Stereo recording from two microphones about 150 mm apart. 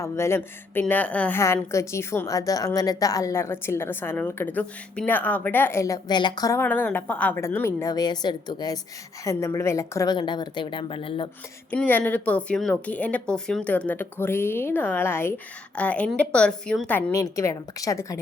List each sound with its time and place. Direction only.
0.0 s speech: 15° left (ahead or behind)
6.6 s a woman's voice: 10° left (ahead or behind); by 11.3 s 35° left (ahead or behind)
11.7 s speech: 10° left (ahead or behind)
17.1 s a woman's voice: 20° left (ahead or behind)